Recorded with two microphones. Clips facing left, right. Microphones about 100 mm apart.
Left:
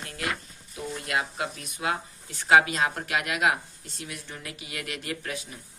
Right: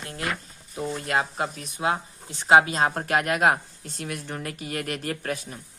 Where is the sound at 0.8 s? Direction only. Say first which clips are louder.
Right 4 dB; 35° right (ahead or behind).